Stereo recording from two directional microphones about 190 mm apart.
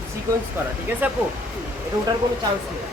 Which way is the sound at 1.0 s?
10° right (ahead or behind).